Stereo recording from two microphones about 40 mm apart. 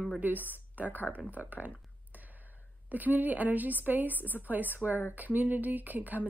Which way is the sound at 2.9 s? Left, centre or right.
Right.